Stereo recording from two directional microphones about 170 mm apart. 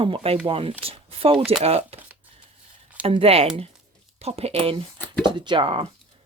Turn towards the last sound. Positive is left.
turn(degrees=-30)  # may be behind; listen again after turning